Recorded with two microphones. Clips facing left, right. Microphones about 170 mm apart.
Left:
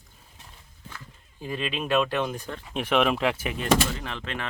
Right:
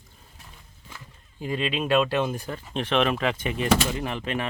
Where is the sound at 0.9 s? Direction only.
15° right (ahead or behind).